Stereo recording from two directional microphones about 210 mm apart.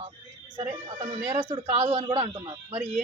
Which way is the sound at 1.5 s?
25° right (ahead or behind).